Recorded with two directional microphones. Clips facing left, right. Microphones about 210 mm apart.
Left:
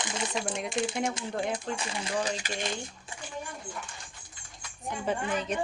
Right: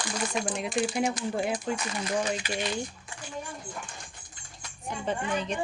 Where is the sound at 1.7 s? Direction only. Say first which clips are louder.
Right 2 dB; 30° left (ahead or behind).